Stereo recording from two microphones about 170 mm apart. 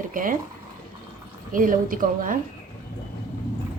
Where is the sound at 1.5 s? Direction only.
55° right (ahead or behind).